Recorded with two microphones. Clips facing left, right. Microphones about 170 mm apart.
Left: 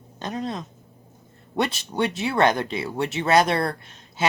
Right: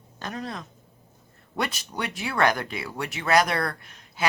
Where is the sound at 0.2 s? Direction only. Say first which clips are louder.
Left 5 dB; 20° left (ahead or behind).